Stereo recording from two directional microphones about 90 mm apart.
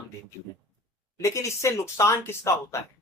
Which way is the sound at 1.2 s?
35° left (ahead or behind).